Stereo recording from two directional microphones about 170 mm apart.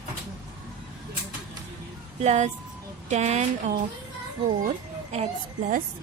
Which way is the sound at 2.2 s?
40° right (ahead or behind).